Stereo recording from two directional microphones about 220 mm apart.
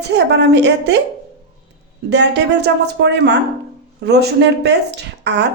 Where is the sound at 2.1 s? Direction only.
50° right (ahead or behind).